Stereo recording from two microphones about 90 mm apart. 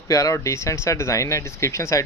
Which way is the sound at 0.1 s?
40° left (ahead or behind).